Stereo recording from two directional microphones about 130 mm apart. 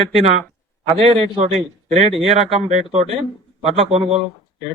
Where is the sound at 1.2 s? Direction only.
55° right (ahead or behind).